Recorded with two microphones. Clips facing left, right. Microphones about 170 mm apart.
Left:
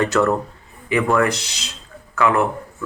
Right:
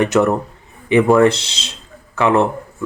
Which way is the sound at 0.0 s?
20° right (ahead or behind).